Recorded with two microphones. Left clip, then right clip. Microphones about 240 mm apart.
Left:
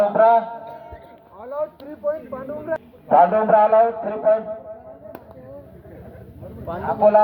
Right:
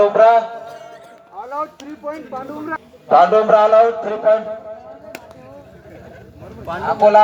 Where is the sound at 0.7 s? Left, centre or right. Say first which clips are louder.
Right 2 dB; right.